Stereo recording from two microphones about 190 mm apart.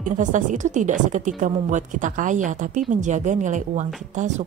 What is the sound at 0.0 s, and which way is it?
Speech, 40° right (ahead or behind).